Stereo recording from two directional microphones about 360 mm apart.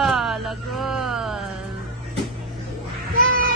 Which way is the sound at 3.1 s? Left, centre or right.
Right.